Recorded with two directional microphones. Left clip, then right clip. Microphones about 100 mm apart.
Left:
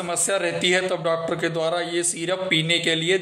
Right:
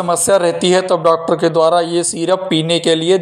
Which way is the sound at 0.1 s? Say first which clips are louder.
Right 11 dB; 60° right (ahead or behind).